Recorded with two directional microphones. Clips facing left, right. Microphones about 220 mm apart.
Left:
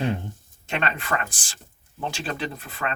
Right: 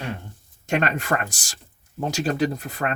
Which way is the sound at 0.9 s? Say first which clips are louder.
Right 4 dB; 40° right (ahead or behind).